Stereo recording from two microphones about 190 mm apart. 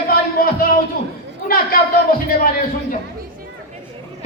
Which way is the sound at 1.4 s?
50° left (ahead or behind).